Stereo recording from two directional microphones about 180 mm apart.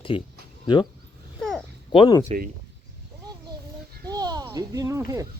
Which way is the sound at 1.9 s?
30° left (ahead or behind).